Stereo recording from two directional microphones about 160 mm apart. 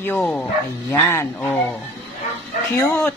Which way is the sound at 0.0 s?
10° left (ahead or behind).